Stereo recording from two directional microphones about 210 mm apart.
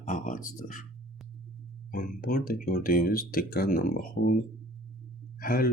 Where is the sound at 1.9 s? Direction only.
40° left (ahead or behind).